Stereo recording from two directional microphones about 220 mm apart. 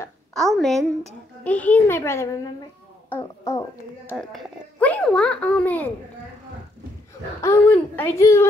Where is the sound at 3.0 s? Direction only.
10° left (ahead or behind).